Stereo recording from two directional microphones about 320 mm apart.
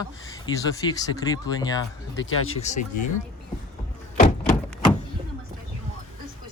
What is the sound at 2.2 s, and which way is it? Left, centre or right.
Speech, left.